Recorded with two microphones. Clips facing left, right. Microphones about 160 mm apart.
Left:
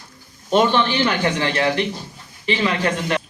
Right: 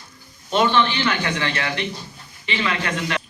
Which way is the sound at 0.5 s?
40° left (ahead or behind).